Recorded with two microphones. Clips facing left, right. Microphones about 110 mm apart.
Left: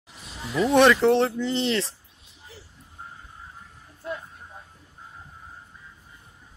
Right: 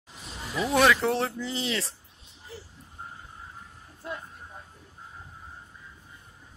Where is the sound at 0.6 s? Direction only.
Centre (ahead or behind).